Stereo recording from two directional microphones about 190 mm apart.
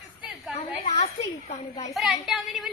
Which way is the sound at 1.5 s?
35° left (ahead or behind).